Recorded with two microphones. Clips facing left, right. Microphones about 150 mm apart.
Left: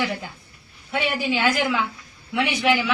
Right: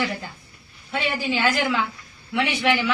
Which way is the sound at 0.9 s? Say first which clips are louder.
Left 1 dB; 10° left (ahead or behind).